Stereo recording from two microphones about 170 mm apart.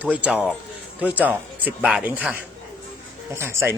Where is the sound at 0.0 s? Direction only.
10° right (ahead or behind).